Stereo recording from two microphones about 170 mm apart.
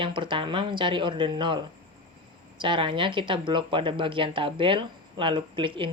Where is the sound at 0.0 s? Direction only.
30° right (ahead or behind).